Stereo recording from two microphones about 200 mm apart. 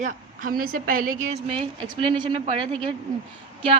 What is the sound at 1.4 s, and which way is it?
A woman's voice, 25° right (ahead or behind).